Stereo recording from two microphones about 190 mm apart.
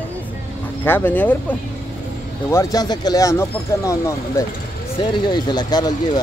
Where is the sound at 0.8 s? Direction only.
10° left (ahead or behind).